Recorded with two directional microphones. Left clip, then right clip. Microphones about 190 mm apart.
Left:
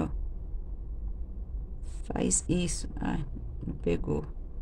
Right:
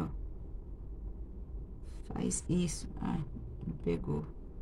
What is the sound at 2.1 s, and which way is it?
Speech, 50° left (ahead or behind).